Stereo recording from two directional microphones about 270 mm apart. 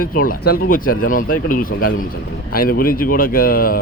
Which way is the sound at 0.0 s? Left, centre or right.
Left.